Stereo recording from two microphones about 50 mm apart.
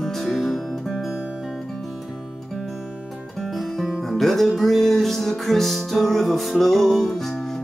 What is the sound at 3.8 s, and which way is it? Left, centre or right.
Music, centre.